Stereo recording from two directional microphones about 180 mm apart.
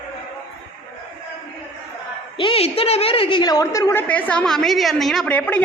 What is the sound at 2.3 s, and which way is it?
A woman's voice, 30° left (ahead or behind).